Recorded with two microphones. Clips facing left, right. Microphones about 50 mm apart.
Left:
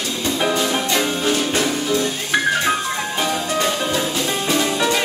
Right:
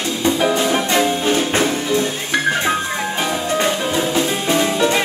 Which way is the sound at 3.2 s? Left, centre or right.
Centre.